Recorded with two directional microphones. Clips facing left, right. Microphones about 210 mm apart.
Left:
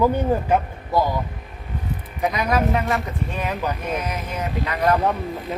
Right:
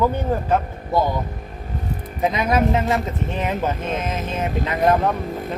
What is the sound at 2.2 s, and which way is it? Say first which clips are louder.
Speech: right 2 dB; 25° right (ahead or behind).